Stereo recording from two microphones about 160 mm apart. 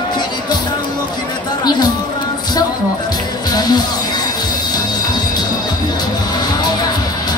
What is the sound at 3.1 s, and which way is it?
Music, 25° left (ahead or behind).